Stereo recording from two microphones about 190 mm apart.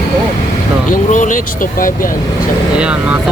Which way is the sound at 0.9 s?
40° left (ahead or behind).